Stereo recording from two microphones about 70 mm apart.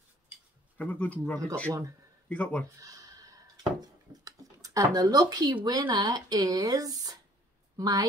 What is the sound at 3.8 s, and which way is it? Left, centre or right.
Speech, right.